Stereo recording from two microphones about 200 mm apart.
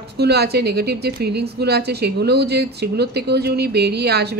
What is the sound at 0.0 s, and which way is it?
Speech, 55° right (ahead or behind).